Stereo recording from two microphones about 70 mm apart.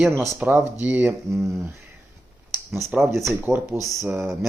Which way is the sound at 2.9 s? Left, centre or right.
Centre.